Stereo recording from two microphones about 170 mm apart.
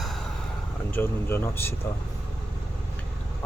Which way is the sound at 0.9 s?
15° left (ahead or behind).